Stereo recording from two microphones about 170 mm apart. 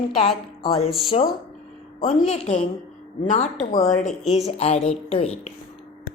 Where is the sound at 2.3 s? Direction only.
40° left (ahead or behind).